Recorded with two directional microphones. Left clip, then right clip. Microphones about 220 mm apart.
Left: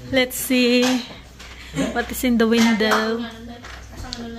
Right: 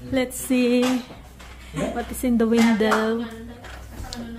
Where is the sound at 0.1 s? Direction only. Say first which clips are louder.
Left 4 dB; 10° right (ahead or behind).